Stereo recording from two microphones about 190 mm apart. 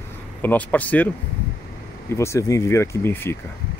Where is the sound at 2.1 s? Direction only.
15° left (ahead or behind).